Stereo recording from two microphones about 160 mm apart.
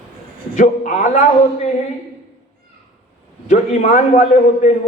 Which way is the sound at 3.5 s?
50° left (ahead or behind).